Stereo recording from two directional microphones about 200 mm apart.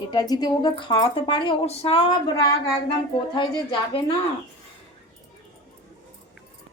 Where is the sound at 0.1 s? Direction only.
20° left (ahead or behind).